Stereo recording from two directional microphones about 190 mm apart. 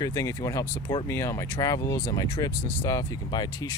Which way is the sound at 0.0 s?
15° left (ahead or behind).